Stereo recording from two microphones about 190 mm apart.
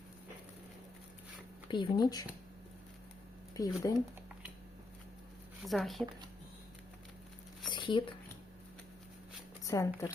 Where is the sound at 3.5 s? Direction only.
15° left (ahead or behind).